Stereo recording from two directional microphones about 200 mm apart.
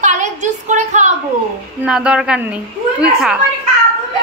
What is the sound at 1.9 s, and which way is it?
A woman's voice, 5° right (ahead or behind).